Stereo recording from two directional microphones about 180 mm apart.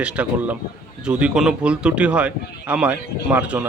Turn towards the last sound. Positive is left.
turn(degrees=-10)  # may be behind; listen again after turning